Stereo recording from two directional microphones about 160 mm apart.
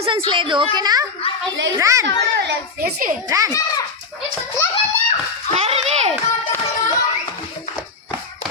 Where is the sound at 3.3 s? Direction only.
20° right (ahead or behind).